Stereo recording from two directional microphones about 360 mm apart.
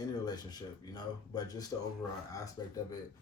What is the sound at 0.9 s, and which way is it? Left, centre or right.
A man's voice, centre.